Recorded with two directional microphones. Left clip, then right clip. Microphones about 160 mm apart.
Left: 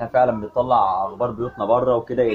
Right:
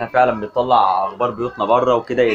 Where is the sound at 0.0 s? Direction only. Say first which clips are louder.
Right 3 dB; centre (ahead or behind).